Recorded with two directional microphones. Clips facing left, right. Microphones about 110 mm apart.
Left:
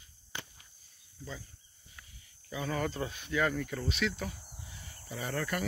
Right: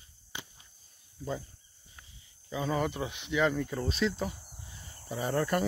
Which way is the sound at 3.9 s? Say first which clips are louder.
Right 3 dB; 30° right (ahead or behind).